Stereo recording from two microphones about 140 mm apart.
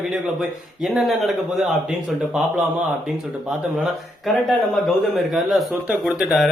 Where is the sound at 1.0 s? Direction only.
Centre (ahead or behind).